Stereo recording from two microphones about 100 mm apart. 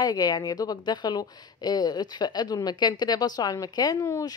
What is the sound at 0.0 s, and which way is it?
Speech, 40° left (ahead or behind).